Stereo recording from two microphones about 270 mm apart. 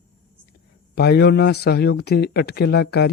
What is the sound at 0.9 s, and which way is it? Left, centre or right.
Speech, left.